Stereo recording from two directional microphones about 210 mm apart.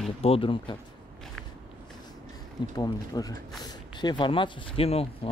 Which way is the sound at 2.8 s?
15° left (ahead or behind).